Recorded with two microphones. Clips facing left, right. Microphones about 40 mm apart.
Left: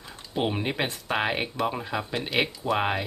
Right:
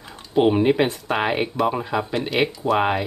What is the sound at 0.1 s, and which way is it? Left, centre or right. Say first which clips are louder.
Speech: right 10 dB; centre.